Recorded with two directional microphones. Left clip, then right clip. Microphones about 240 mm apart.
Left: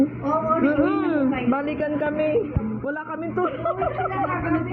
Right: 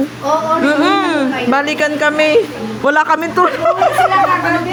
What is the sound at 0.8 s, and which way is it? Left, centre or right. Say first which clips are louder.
A woman's voice: right 9 dB; centre.